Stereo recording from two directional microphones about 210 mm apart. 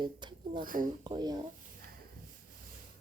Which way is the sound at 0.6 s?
40° right (ahead or behind).